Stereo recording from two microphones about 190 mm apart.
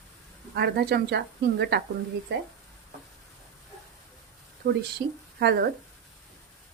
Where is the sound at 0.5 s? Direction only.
60° right (ahead or behind).